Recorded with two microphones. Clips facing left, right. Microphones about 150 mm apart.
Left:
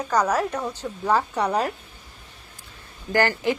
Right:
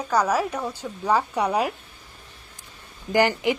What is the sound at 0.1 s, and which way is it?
A woman's voice, 10° right (ahead or behind).